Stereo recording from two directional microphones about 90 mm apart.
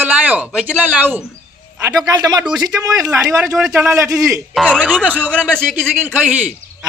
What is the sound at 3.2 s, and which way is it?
Speech, 5° right (ahead or behind).